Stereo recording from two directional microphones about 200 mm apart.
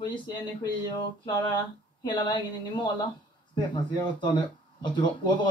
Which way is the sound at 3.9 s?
20° left (ahead or behind).